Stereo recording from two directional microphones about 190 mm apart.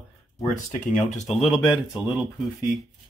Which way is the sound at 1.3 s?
Centre (ahead or behind).